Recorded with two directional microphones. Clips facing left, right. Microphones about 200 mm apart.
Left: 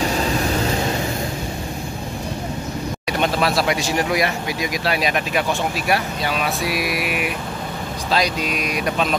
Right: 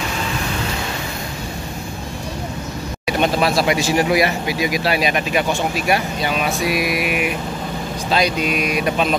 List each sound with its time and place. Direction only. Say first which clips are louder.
0.0 s vehicle: left 4 dB; 35° left (ahead or behind)
3.1 s speech: right 3 dB; 5° right (ahead or behind)